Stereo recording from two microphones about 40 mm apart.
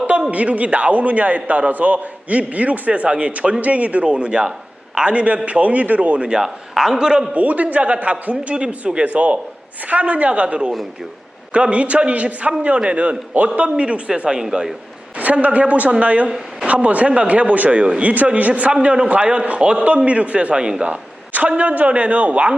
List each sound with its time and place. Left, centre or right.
0.3 s a man's voice: right
6.4 s a woman's voice: centre
7.3 s a man's voice: right
14.5 s a woman's voice: centre
15.2 s a man's voice: right
17.7 s speech: right
18.0 s a man's voice: right
20.8 s a man's voice: right